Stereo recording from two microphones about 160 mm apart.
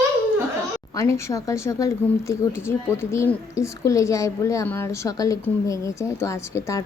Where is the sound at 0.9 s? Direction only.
20° left (ahead or behind).